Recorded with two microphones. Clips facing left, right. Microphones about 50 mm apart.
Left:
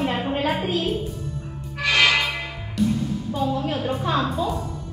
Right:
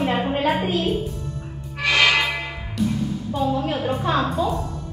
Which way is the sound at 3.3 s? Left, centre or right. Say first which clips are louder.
Right 2 dB; centre.